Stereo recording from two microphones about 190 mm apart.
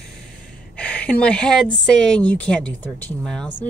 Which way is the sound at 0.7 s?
5° left (ahead or behind).